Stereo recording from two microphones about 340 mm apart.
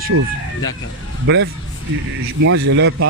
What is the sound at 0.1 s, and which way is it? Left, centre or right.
Speech, right.